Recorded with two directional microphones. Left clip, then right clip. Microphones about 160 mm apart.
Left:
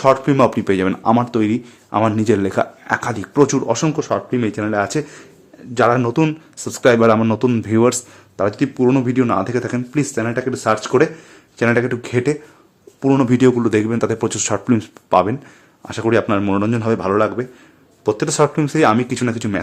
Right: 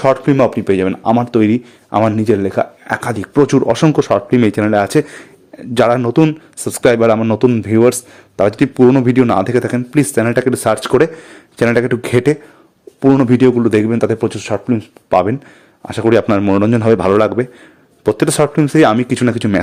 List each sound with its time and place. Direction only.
0.0 s speech: 35° right (ahead or behind)
0.3 s speech: 15° right (ahead or behind)
1.4 s speech: 30° right (ahead or behind)
2.3 s speech: 10° right (ahead or behind)
2.9 s speech: 25° right (ahead or behind); by 6.0 s 55° right (ahead or behind)
6.0 s speech: 30° right (ahead or behind)
7.2 s speech: 20° right (ahead or behind)
8.4 s speech: 40° right (ahead or behind)
8.9 s speech: 35° right (ahead or behind)
13.0 s speech: 30° right (ahead or behind)
14.3 s speech: 10° right (ahead or behind)
15.1 s speech: 35° right (ahead or behind)
16.8 s a man's voice: 55° right (ahead or behind)
18.0 s speech: 40° right (ahead or behind)